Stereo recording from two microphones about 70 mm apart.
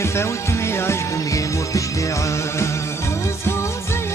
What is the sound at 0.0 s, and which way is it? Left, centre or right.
Music, left.